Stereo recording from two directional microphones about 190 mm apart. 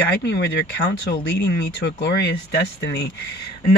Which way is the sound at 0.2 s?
65° left (ahead or behind).